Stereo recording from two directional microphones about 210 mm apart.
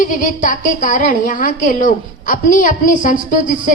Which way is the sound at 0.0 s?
40° left (ahead or behind).